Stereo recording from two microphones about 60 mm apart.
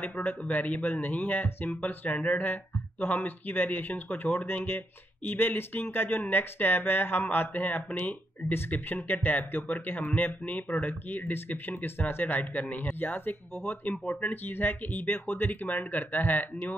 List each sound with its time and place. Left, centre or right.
0.0 s speech: left